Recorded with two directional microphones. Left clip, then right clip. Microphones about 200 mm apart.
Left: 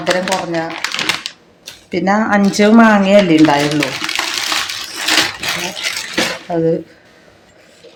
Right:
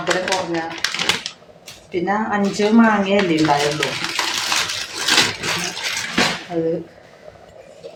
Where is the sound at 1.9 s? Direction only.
60° left (ahead or behind).